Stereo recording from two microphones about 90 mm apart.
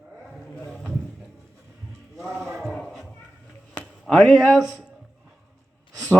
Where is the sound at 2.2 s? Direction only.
5° right (ahead or behind).